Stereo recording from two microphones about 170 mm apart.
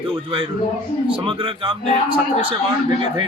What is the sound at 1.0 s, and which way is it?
A man's voice, 30° right (ahead or behind).